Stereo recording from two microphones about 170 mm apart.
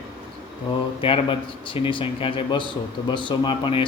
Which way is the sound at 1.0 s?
30° left (ahead or behind).